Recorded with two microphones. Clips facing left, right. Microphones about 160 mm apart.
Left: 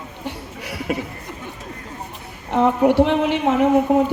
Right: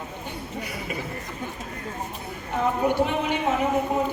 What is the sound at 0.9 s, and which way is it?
Speech, 70° left (ahead or behind).